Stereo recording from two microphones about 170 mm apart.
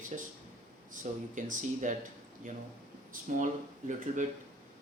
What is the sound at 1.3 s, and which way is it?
Speech, 50° right (ahead or behind).